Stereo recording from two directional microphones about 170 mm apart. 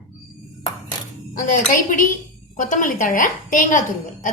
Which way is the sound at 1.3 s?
50° left (ahead or behind).